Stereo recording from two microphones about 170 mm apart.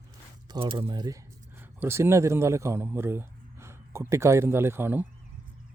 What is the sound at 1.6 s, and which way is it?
A man's voice, 15° right (ahead or behind).